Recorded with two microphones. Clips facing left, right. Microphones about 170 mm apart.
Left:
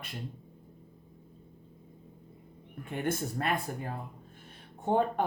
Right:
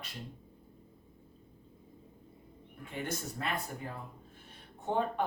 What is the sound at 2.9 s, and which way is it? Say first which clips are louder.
Speech: left 6 dB; 50° left (ahead or behind).